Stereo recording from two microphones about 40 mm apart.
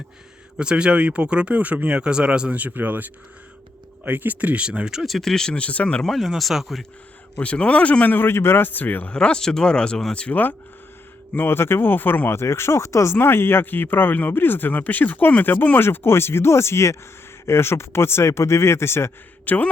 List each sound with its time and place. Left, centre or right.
0.6 s speech: right
2.0 s speech: right
2.5 s speech: right
4.6 s speech: right
5.0 s speech: centre
5.5 s speech: left
6.1 s speech: centre
7.3 s speech: left
8.3 s speech: left
9.1 s speech: left
11.4 s speech: left
13.1 s speech: left
15.8 s speech: left
19.5 s a man's voice: left